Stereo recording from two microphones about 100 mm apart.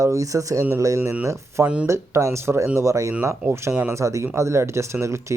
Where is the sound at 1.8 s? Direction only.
30° right (ahead or behind).